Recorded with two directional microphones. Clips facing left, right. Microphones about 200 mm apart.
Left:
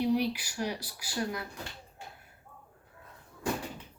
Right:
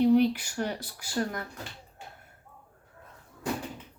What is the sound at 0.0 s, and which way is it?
Speech, 50° right (ahead or behind).